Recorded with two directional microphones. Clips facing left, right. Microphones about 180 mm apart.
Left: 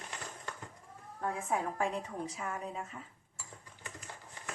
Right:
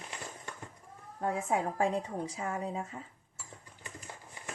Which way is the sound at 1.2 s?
30° right (ahead or behind).